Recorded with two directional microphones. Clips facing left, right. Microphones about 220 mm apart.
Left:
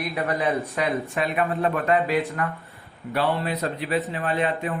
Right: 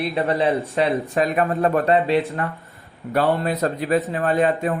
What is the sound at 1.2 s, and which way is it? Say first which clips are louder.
Speech: right 5 dB; 45° right (ahead or behind).